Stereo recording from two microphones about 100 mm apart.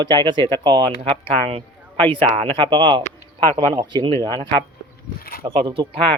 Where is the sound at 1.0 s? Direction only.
70° right (ahead or behind); by 4.6 s 45° right (ahead or behind).